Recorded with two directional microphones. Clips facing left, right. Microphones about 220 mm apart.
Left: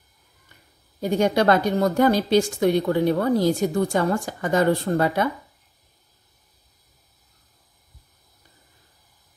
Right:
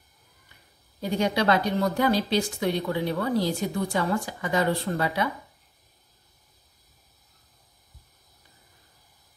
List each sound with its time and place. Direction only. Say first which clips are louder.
1.0 s a woman's voice: left 5 dB; 45° left (ahead or behind)